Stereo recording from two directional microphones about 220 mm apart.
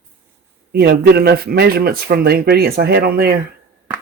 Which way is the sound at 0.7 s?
45° right (ahead or behind).